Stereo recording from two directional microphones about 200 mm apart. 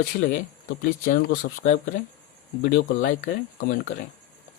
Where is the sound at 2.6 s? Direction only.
50° left (ahead or behind).